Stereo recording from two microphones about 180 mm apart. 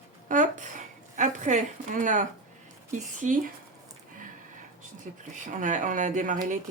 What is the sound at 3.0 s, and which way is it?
Speech, 45° right (ahead or behind).